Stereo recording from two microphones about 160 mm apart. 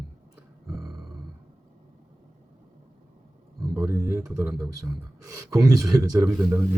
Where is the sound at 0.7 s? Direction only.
Centre (ahead or behind).